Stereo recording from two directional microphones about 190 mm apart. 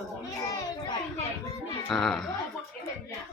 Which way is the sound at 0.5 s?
20° left (ahead or behind).